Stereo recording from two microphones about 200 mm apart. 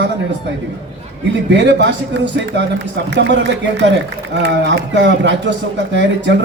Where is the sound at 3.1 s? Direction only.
60° right (ahead or behind).